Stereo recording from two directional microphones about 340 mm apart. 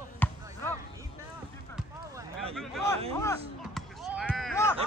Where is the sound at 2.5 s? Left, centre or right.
Centre.